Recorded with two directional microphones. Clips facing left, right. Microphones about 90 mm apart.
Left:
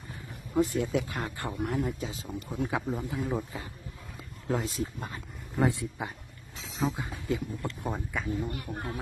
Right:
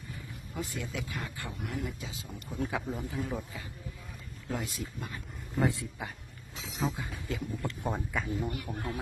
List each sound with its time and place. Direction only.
0.5 s speech: 40° left (ahead or behind)
2.6 s speech: 20° left (ahead or behind)
5.6 s speech: 20° left (ahead or behind)
6.6 s speech: centre (ahead or behind)
6.9 s speech: 25° left (ahead or behind)
8.1 s speech: centre (ahead or behind)
8.7 s speech: 35° left (ahead or behind)